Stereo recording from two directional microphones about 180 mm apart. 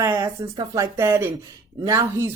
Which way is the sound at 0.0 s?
20° right (ahead or behind).